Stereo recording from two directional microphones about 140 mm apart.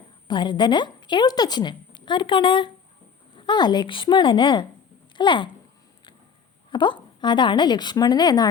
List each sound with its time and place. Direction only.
0.3 s a woman's voice: 35° left (ahead or behind)
6.7 s a woman's voice: 35° left (ahead or behind)